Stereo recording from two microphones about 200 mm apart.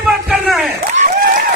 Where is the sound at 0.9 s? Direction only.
45° right (ahead or behind).